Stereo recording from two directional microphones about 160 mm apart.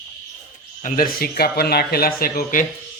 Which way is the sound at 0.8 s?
65° left (ahead or behind).